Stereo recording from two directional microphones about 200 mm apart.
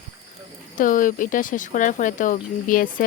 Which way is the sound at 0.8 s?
40° left (ahead or behind).